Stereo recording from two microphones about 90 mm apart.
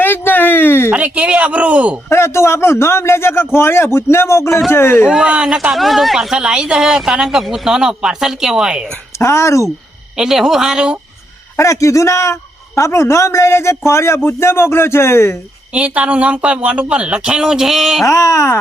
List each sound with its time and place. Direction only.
0.0 s a sound: 20° left (ahead or behind)
0.9 s speech: 15° right (ahead or behind)
2.0 s speech: 30° left (ahead or behind)
5.0 s speech: 10° right (ahead or behind)
9.1 s a man's voice: 30° left (ahead or behind)
10.2 s speech: 5° right (ahead or behind)
11.5 s a man's voice: 35° left (ahead or behind)
15.7 s speech: 15° right (ahead or behind)
18.0 s a man's voice: 35° left (ahead or behind)